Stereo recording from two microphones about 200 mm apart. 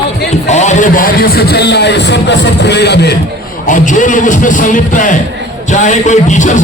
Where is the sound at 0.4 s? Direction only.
35° left (ahead or behind); by 3.1 s 55° left (ahead or behind).